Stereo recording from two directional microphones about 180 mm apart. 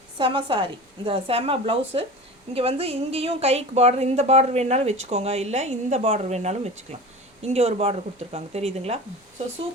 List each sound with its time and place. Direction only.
0.2 s a woman's voice: 25° right (ahead or behind)